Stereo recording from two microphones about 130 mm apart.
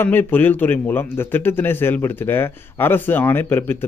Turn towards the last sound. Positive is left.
turn(degrees=15)  # may be behind; listen again after turning